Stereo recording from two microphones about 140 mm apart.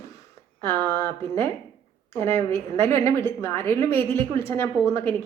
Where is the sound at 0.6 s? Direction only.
20° left (ahead or behind).